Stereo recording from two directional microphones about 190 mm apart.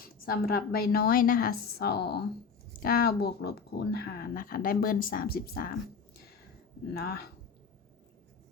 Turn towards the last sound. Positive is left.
turn(degrees=55)  # may be behind; listen again after turning